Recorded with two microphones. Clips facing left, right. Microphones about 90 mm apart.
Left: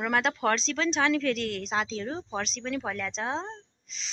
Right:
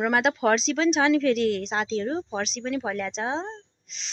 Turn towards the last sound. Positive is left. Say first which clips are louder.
# right 1 dB
turn(degrees=0)  # may be behind; listen again after turning